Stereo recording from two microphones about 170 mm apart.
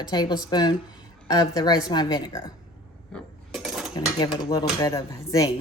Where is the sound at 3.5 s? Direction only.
Centre (ahead or behind).